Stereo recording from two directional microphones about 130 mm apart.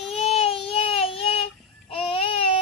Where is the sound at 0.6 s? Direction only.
45° left (ahead or behind).